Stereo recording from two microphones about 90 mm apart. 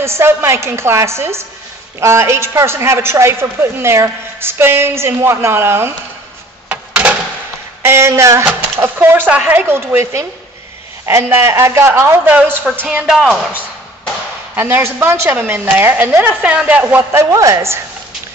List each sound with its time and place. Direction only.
0.0 s a woman's voice: 30° right (ahead or behind)
6.7 s a sound: 20° right (ahead or behind)
7.8 s a woman's voice: 30° right (ahead or behind)
11.2 s a woman's voice: 30° right (ahead or behind)
12.8 s speech: 10° right (ahead or behind)
14.5 s a woman's voice: 25° right (ahead or behind)
17.2 s speech: 35° right (ahead or behind)